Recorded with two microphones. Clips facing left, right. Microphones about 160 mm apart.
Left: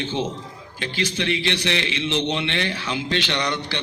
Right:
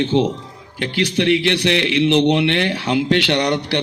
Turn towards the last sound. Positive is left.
turn(degrees=-65)  # may be behind; listen again after turning